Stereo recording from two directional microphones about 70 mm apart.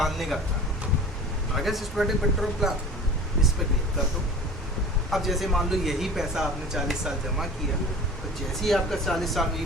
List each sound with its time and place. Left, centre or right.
0.0 s speech: centre
1.5 s speech: centre
5.1 s speech: centre
8.6 s speech: centre